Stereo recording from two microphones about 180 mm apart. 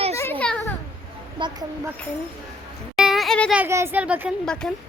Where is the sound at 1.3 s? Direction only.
25° right (ahead or behind).